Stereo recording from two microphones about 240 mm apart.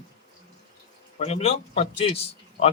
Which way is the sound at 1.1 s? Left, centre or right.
Left.